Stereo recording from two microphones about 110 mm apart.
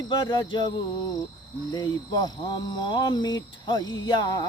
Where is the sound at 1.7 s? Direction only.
40° left (ahead or behind).